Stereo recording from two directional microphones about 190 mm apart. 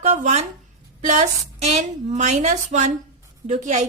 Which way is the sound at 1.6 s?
35° right (ahead or behind).